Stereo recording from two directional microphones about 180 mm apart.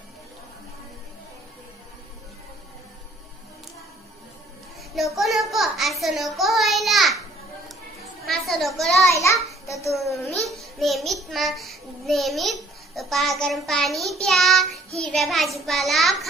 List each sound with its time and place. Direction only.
4.9 s child singing: centre (ahead or behind)
8.3 s a child's voice: centre (ahead or behind)
9.1 s a child's voice: 15° left (ahead or behind)
10.5 s a child's voice: centre (ahead or behind)